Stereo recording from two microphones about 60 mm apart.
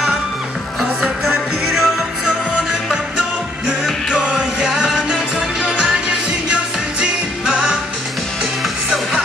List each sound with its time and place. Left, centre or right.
0.7 s music: centre
4.2 s music: centre